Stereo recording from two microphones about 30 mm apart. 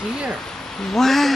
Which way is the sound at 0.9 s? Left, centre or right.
Centre.